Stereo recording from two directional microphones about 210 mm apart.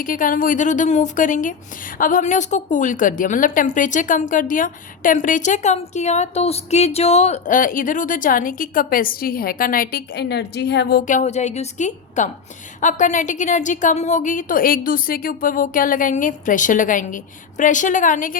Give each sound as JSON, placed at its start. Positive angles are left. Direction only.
{"t": 0.0, "sound": "a woman's voice", "side_deg": 40}